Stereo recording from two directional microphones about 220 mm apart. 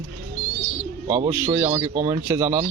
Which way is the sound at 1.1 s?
15° right (ahead or behind).